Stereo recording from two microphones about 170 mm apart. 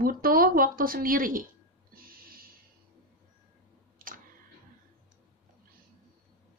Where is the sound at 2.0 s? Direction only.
60° right (ahead or behind).